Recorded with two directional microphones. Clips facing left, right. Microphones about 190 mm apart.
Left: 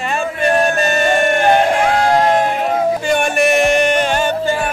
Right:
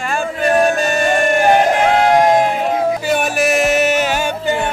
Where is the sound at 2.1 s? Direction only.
15° right (ahead or behind).